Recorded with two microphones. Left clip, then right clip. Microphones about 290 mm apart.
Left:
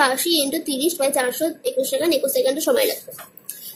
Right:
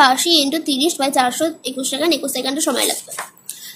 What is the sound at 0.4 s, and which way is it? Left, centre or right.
A woman's voice, right.